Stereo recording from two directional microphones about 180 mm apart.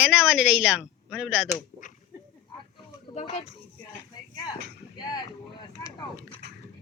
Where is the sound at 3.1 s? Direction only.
40° left (ahead or behind).